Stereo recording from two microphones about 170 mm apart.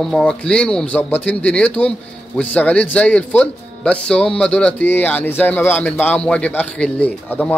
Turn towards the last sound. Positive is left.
turn(degrees=10)  # may be behind; listen again after turning